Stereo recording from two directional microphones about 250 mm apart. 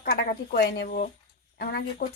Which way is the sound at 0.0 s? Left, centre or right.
Left.